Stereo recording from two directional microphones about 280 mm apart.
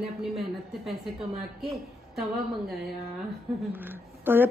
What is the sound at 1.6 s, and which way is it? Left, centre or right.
Speech, centre.